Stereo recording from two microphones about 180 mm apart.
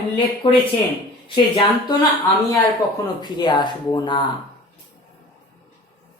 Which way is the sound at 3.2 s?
25° left (ahead or behind).